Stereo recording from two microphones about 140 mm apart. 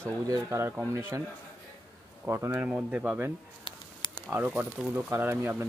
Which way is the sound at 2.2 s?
15° right (ahead or behind).